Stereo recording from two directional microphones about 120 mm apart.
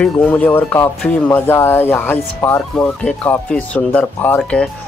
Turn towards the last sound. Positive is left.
turn(degrees=10)  # may be behind; listen again after turning